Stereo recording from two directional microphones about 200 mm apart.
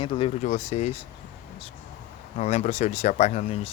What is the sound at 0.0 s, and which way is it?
Speech, 30° left (ahead or behind).